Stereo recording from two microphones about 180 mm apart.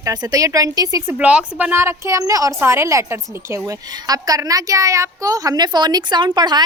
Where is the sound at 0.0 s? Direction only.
20° right (ahead or behind).